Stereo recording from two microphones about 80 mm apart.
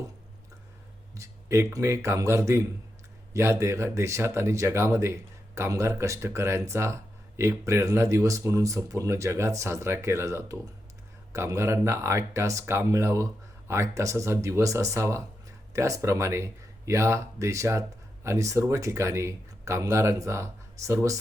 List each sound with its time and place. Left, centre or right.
1.1 s speech: right